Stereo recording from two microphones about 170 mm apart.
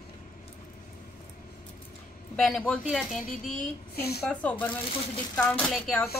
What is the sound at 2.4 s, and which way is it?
Speech, 5° left (ahead or behind).